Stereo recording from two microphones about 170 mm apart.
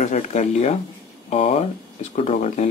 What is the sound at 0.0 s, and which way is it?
Speech, 45° left (ahead or behind).